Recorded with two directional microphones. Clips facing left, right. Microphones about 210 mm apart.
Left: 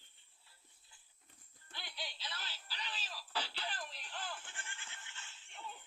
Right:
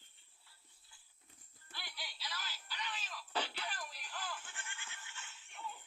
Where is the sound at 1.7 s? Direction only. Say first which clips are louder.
Left 3 dB; 20° left (ahead or behind).